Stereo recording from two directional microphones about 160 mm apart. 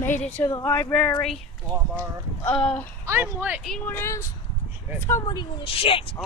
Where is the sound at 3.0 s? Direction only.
15° right (ahead or behind).